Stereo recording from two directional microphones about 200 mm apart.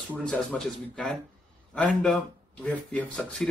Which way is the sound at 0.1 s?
5° left (ahead or behind).